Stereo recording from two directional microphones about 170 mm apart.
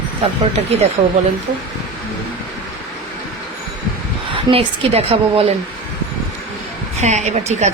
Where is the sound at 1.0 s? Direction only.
40° right (ahead or behind).